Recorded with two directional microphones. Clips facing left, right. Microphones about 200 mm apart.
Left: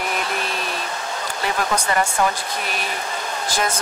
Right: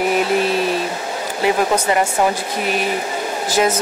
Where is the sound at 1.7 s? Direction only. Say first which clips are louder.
Right 4 dB; 20° right (ahead or behind).